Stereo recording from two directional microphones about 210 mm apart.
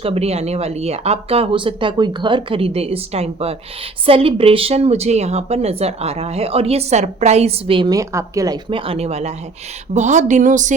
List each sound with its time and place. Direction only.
0.0 s speech: 30° right (ahead or behind)